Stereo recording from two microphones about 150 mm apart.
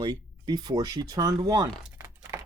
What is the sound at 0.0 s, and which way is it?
Speech, 30° right (ahead or behind).